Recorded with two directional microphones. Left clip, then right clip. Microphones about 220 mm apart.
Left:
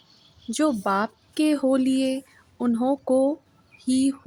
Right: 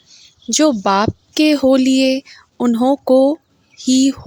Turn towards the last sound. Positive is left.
turn(degrees=-35)  # may be behind; listen again after turning